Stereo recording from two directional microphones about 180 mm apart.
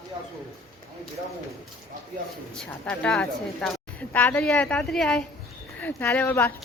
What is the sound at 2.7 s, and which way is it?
A woman's voice, 5° left (ahead or behind).